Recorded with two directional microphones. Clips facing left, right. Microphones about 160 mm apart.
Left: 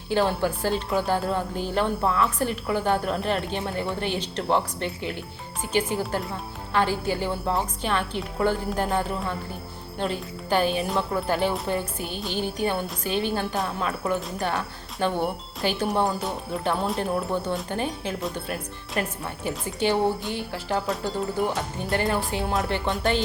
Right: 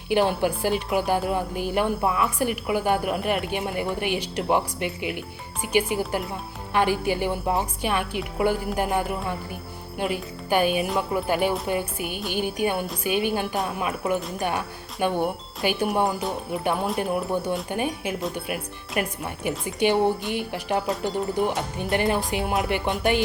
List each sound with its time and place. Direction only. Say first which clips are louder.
0.1 s speech: right 2 dB; 15° right (ahead or behind)